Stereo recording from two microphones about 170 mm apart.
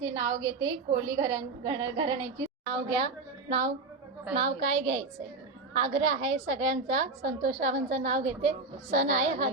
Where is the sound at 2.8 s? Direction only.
35° right (ahead or behind).